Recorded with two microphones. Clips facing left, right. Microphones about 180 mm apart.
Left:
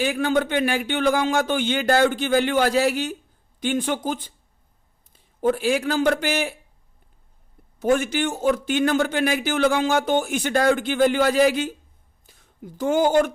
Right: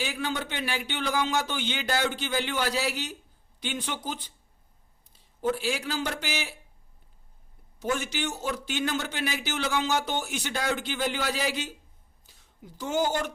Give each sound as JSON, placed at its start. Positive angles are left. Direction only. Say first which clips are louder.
{"t": 0.0, "sound": "a man's voice", "louder": "left 10 dB", "side_deg": 50}
{"t": 7.8, "sound": "a man's voice", "louder": "left 9 dB", "side_deg": 55}